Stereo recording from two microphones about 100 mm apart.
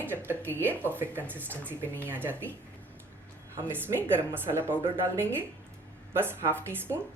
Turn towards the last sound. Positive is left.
turn(degrees=-25)  # may be behind; listen again after turning